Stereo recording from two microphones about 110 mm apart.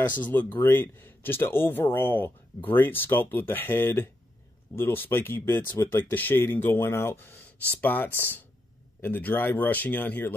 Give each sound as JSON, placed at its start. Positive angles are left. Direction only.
{"t": 0.0, "sound": "speech", "side_deg": 15}